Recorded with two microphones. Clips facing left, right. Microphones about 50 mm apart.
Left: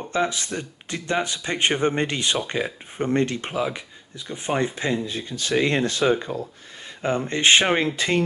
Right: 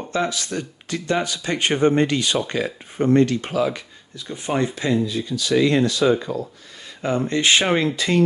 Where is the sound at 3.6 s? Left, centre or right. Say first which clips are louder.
Right 4 dB; centre.